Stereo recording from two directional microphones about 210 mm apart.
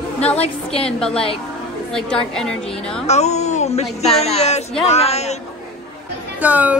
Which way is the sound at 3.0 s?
30° left (ahead or behind).